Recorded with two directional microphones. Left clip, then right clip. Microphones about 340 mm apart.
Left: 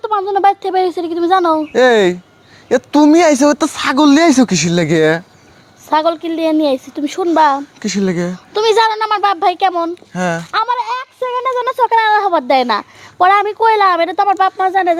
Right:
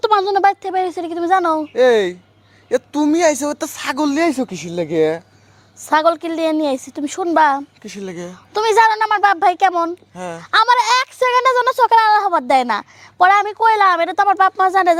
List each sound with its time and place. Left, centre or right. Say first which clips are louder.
0.0 s a sound: right 2 dB; right
0.3 s a sound: left 2 dB; right
0.6 s a woman's voice: left 5 dB; centre
1.7 s speech: left 3 dB; left
5.9 s a woman's voice: left 1 dB; right
7.8 s speech: left 11 dB; left
8.5 s speech: left 1 dB; right
10.2 s speech: left 10 dB; left
10.5 s a woman's voice: right 7 dB; right